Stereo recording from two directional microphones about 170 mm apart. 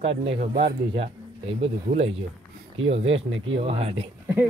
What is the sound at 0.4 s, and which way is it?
Speech, 45° right (ahead or behind).